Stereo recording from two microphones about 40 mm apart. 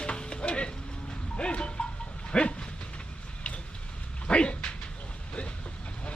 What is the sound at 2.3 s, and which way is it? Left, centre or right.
Dog, left.